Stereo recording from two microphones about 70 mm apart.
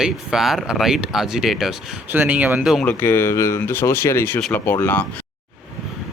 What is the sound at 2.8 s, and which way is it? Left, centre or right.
Speech, left.